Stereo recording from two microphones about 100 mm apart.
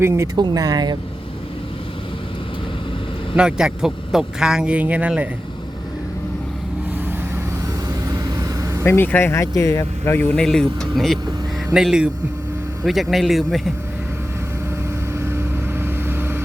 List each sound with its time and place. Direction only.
0.0 s speech: 25° right (ahead or behind)
0.3 s speech: 45° right (ahead or behind)
3.3 s speech: 10° right (ahead or behind)
8.1 s vehicle: 35° right (ahead or behind)
8.8 s speech: 20° left (ahead or behind)
10.2 s speech: 15° left (ahead or behind)
10.4 s speech: 5° left (ahead or behind)
15.2 s vehicle: 25° right (ahead or behind)